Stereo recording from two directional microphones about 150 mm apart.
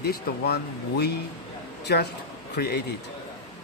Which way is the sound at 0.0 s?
90° left.